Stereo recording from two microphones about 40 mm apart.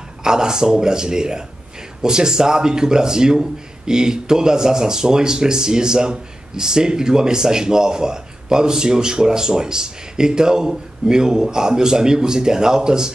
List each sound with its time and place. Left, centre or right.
0.2 s a man's voice: centre